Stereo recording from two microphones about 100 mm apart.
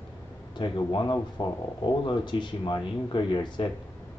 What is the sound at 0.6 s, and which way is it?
Speech, 50° left (ahead or behind).